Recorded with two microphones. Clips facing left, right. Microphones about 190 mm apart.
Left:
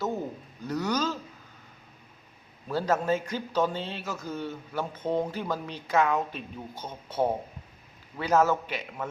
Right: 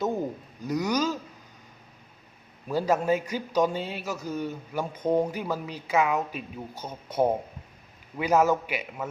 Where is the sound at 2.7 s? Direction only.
10° right (ahead or behind).